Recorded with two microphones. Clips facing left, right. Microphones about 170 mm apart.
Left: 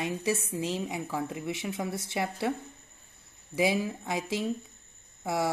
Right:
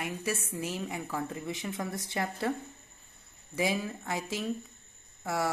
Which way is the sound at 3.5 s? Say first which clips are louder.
Left 4 dB; 10° left (ahead or behind).